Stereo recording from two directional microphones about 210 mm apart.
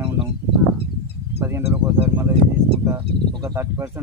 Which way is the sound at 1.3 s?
10° right (ahead or behind).